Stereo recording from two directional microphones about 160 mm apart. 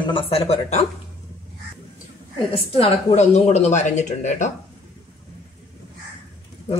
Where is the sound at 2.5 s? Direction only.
35° left (ahead or behind).